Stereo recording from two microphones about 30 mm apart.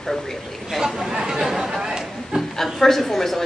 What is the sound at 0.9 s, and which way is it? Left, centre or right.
Speech, centre.